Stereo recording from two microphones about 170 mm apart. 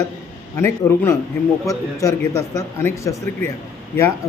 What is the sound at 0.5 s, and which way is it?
A man's voice, 15° left (ahead or behind).